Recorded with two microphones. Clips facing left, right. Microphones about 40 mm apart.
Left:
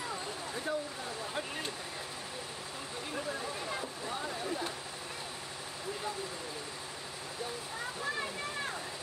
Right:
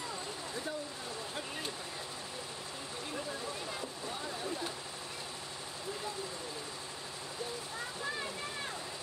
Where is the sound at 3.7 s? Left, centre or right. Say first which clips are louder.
Left 3 dB; centre.